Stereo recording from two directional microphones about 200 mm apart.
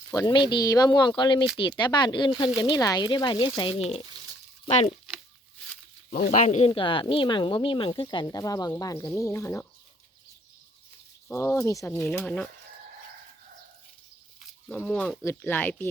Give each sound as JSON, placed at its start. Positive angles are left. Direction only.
{"t": 0.1, "sound": "speech", "side_deg": 20}
{"t": 6.1, "sound": "speech", "side_deg": 45}
{"t": 6.7, "sound": "speech", "side_deg": 25}
{"t": 11.3, "sound": "speech", "side_deg": 15}
{"t": 14.4, "sound": "speech", "side_deg": 5}